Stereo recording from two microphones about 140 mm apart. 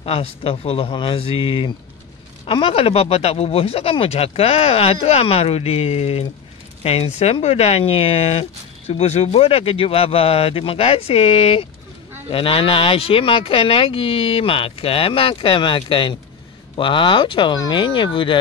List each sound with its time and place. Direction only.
0.0 s speech: 45° left (ahead or behind)